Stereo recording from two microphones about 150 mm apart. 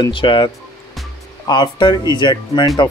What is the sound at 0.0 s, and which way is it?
Speech, 35° left (ahead or behind).